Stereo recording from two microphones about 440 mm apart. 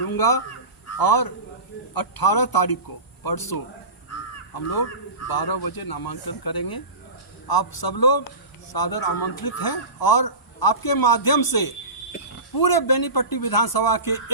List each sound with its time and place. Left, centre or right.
0.1 s fowl: left
0.9 s a man's voice: left